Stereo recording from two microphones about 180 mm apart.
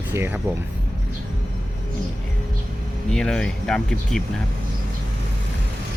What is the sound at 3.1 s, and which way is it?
Speech, 5° left (ahead or behind).